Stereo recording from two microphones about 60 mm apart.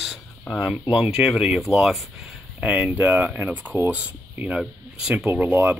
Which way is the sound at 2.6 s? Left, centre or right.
Centre.